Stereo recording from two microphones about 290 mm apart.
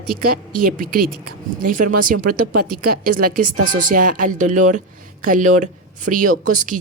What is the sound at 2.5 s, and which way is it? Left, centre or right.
Speech, right.